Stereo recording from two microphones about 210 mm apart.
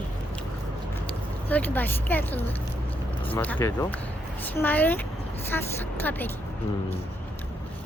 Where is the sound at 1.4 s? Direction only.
10° left (ahead or behind).